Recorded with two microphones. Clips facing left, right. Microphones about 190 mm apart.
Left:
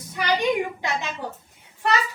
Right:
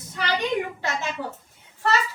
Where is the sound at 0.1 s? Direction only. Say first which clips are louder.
Left 3 dB; 15° left (ahead or behind).